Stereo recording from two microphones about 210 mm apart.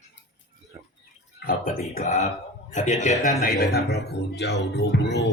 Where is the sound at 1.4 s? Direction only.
45° left (ahead or behind).